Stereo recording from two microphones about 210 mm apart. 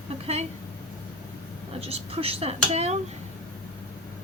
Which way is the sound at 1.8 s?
30° right (ahead or behind).